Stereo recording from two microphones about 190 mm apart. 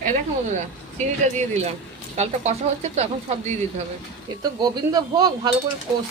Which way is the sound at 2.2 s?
35° right (ahead or behind).